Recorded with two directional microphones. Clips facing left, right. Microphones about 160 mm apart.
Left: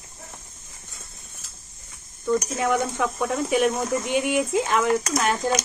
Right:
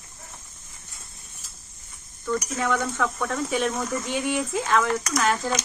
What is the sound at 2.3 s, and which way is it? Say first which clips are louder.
Speech: left 3 dB; 20° left (ahead or behind).